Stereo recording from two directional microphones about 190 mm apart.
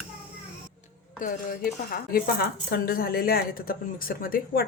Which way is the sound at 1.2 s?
45° left (ahead or behind).